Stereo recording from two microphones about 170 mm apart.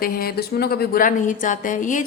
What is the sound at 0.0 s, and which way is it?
A woman's voice, 60° left (ahead or behind).